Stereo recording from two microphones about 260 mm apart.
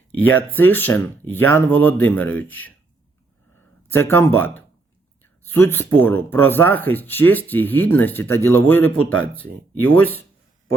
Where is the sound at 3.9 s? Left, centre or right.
Centre.